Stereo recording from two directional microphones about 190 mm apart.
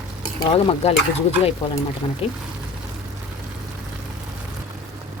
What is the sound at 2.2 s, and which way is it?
Speech, 30° left (ahead or behind).